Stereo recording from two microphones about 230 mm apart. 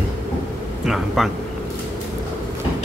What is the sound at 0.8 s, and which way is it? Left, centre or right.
Speech, centre.